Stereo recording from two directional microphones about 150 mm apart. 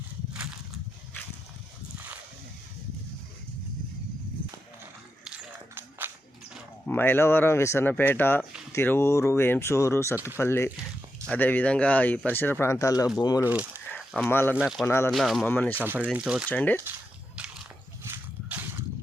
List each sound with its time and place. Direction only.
6.0 s a sound: 15° right (ahead or behind)
6.8 s speech: 15° left (ahead or behind)
13.4 s speech: 10° right (ahead or behind)
13.9 s a sound: 5° left (ahead or behind)
14.3 s speech: 15° left (ahead or behind)
14.5 s speech: 5° right (ahead or behind)
14.8 s speech: 15° left (ahead or behind)
15.1 s speech: centre (ahead or behind)
15.4 s speech: 10° left (ahead or behind)
15.7 s speech: 10° right (ahead or behind)
16.5 s speech: 10° left (ahead or behind)
18.0 s a sound: 15° right (ahead or behind)